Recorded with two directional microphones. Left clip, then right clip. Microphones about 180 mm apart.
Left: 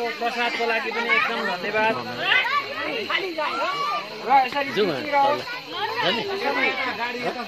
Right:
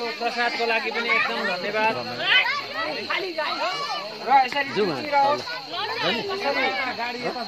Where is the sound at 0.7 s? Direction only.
20° right (ahead or behind).